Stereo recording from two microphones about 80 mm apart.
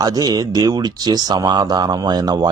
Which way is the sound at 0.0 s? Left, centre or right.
Right.